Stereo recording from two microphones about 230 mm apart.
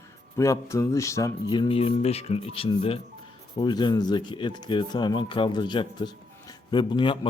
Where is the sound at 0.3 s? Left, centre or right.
Centre.